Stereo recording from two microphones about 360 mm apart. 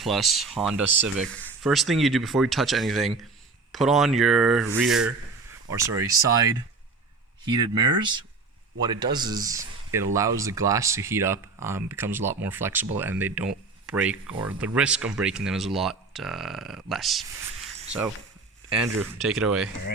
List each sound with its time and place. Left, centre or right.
0.0 s speech: centre
18.9 s speech: centre